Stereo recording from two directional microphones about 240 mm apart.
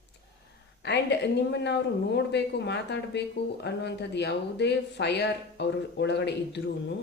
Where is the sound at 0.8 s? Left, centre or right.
Left.